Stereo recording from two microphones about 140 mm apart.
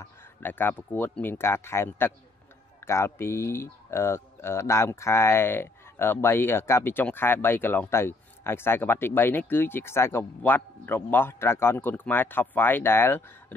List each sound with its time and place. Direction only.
0.0 s speech: 15° left (ahead or behind)